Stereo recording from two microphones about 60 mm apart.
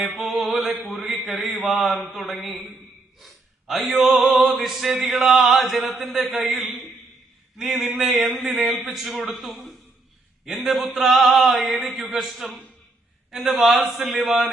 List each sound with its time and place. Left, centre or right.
0.4 s a man's voice: centre
3.2 s gasp: centre
3.8 s a man's voice: centre